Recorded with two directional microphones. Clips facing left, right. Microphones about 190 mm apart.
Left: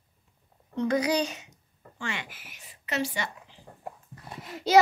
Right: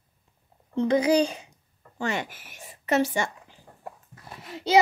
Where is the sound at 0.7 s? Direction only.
30° right (ahead or behind); by 3.5 s 50° right (ahead or behind).